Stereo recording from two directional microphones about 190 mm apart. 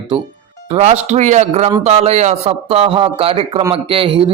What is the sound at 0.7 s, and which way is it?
A man's voice, 35° right (ahead or behind).